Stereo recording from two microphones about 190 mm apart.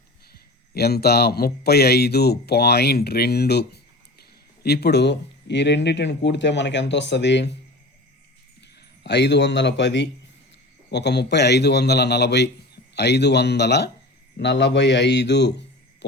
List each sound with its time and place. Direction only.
0.7 s speech: 55° left (ahead or behind)
9.0 s a man's voice: 65° left (ahead or behind)